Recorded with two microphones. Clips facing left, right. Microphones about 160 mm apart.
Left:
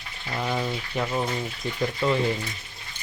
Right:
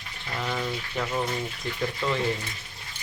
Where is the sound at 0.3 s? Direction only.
15° left (ahead or behind).